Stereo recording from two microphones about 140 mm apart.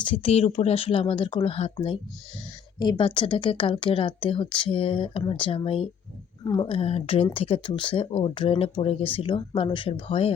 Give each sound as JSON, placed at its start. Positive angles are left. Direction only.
{"t": 0.0, "sound": "speech", "side_deg": 40}
{"t": 2.7, "sound": "speech", "side_deg": 35}